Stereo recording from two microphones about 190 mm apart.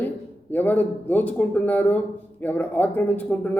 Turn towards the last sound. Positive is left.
turn(degrees=10)  # may be behind; listen again after turning